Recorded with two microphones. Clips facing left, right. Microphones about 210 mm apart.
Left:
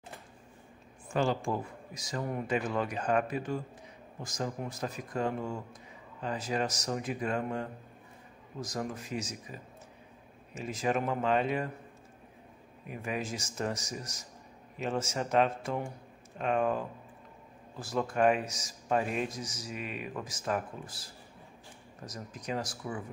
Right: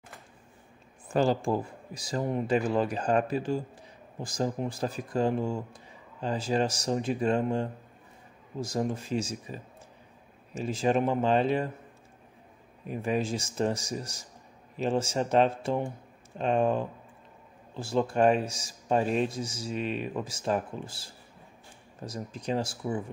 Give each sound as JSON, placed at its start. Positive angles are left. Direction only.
{"t": 1.1, "sound": "a man's voice", "side_deg": -35}
{"t": 12.8, "sound": "a man's voice", "side_deg": -30}